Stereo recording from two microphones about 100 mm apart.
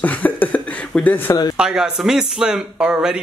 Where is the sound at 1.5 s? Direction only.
5° right (ahead or behind).